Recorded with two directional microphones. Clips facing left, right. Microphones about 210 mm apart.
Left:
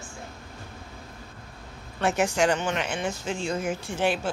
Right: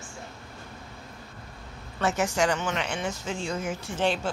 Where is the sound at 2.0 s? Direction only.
15° left (ahead or behind).